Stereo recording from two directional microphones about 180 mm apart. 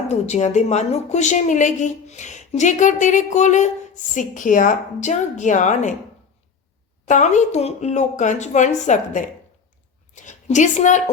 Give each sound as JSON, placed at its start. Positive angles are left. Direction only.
{"t": 0.1, "sound": "a woman's voice", "side_deg": 40}
{"t": 7.1, "sound": "a woman's voice", "side_deg": 40}